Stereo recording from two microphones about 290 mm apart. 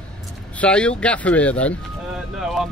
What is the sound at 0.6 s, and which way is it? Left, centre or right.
Speech, centre.